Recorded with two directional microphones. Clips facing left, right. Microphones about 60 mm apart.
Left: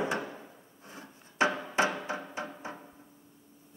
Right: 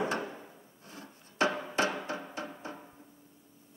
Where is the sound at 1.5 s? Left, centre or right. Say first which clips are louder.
Even; centre.